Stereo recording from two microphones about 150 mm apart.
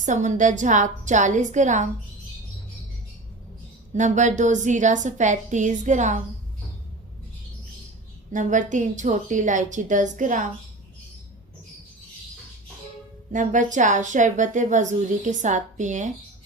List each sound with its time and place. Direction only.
0.0 s a woman's voice: 55° right (ahead or behind)
3.9 s a woman's voice: 55° right (ahead or behind)
8.3 s a woman's voice: 55° right (ahead or behind)
13.3 s a woman's voice: 55° right (ahead or behind)